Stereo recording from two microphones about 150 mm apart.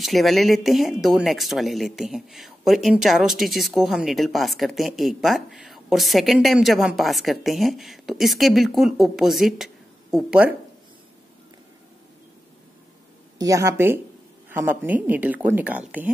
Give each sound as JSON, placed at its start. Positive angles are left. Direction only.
{"t": 0.0, "sound": "speech", "side_deg": 0}
{"t": 13.4, "sound": "speech", "side_deg": -20}